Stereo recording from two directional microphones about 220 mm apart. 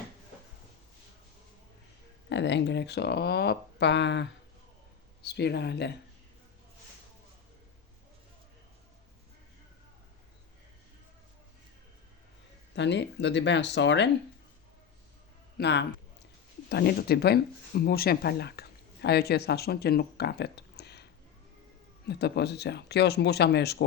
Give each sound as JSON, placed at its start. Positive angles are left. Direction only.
{"t": 2.3, "sound": "speech", "side_deg": 55}
{"t": 12.7, "sound": "speech", "side_deg": 55}
{"t": 15.5, "sound": "speech", "side_deg": 50}